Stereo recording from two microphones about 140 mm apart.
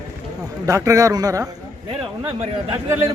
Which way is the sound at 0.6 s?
25° right (ahead or behind).